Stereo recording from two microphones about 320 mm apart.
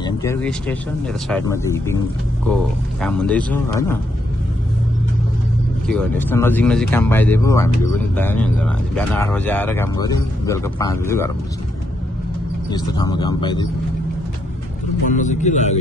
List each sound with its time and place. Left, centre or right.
0.0 s speech: centre
5.9 s speech: centre
12.7 s speech: centre
15.0 s speech: left